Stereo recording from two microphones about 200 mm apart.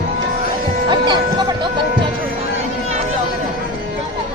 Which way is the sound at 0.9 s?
20° right (ahead or behind).